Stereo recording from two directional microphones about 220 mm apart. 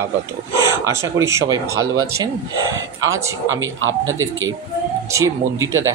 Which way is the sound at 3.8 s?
65° right (ahead or behind).